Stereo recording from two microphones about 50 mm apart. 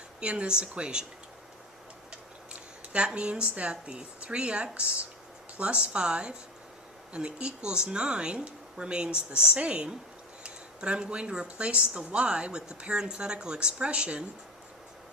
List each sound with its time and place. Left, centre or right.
0.2 s speech: right
2.5 s speech: right